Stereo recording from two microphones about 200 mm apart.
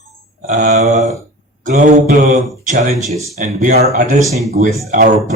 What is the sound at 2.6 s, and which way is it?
Speech, 35° right (ahead or behind).